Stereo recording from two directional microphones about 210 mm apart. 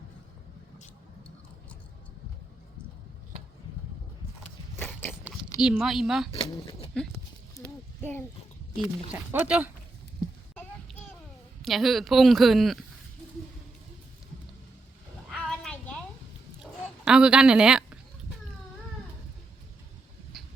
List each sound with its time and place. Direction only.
4.8 s biting: 10° left (ahead or behind)
5.5 s speech: 5° right (ahead or behind)
6.3 s speech: 25° left (ahead or behind)
9.1 s speech: 10° right (ahead or behind)
10.5 s a sound: 10° left (ahead or behind)
11.6 s speech: centre (ahead or behind)
15.3 s a sound: 5° left (ahead or behind)
17.1 s a woman's voice: 5° right (ahead or behind)
20.3 s vehicle: centre (ahead or behind)